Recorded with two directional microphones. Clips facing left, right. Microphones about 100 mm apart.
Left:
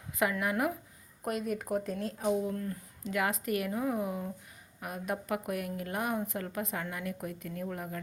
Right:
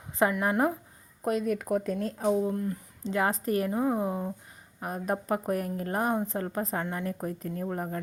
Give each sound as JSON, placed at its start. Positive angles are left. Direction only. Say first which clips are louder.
{"t": 0.2, "sound": "a woman's voice", "louder": "right 5 dB", "side_deg": -35}